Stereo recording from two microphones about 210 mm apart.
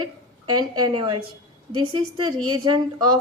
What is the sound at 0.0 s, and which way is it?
A woman's voice, 20° right (ahead or behind).